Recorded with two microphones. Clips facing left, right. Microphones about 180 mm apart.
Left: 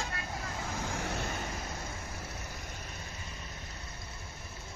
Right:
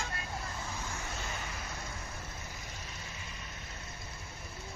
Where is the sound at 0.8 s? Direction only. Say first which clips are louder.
Left 6 dB; 75° left (ahead or behind).